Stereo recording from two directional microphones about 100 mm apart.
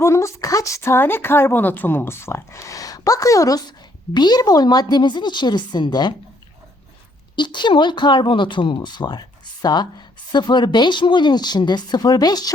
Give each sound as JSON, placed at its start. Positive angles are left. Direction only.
{"t": 0.0, "sound": "speech", "side_deg": 30}
{"t": 4.1, "sound": "speech", "side_deg": 45}
{"t": 7.3, "sound": "speech", "side_deg": 50}